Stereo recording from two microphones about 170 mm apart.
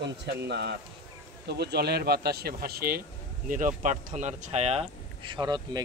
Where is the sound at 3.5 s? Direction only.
50° right (ahead or behind); by 5.8 s 25° right (ahead or behind).